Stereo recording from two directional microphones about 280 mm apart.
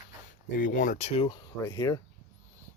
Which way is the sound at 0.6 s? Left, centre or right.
Left.